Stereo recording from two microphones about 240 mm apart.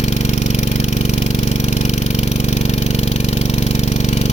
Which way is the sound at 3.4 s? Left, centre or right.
Left.